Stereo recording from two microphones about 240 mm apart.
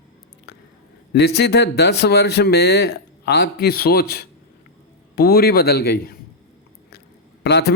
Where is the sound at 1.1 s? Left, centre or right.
Left.